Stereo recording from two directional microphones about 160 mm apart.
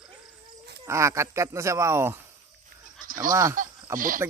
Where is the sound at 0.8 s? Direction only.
20° right (ahead or behind).